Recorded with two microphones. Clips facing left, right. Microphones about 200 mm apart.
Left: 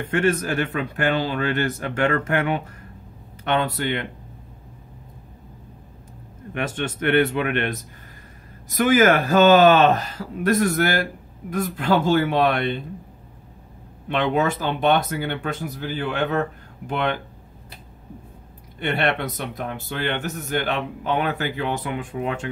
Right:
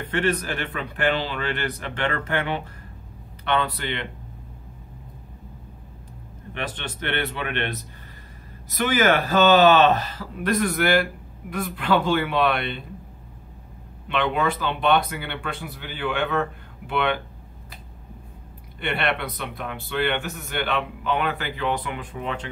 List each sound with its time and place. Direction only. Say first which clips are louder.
0.0 s speech: left 3 dB; 45° left (ahead or behind)
6.6 s speech: left 6 dB; 45° left (ahead or behind)
14.0 s speech: left 2 dB; 45° left (ahead or behind)
18.8 s speech: left 3 dB; 45° left (ahead or behind)